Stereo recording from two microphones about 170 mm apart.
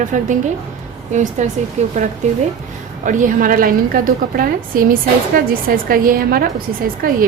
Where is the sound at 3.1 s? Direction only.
50° right (ahead or behind).